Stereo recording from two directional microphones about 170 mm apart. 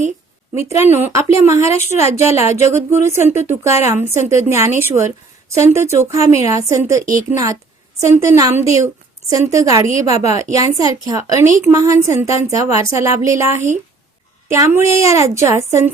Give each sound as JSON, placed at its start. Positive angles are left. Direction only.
{"t": 0.5, "sound": "speech", "side_deg": -15}
{"t": 1.8, "sound": "a woman's voice", "side_deg": 40}
{"t": 2.7, "sound": "a woman's voice", "side_deg": -15}
{"t": 9.8, "sound": "a woman's voice", "side_deg": -45}
{"t": 10.3, "sound": "a woman's voice", "side_deg": -20}